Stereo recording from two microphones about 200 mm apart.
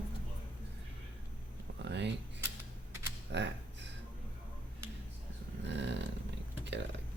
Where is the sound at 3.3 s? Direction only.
60° right (ahead or behind).